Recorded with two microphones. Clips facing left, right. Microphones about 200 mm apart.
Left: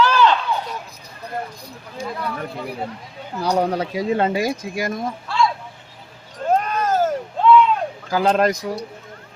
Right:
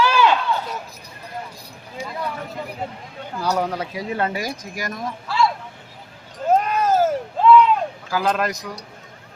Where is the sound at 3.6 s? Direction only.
30° left (ahead or behind).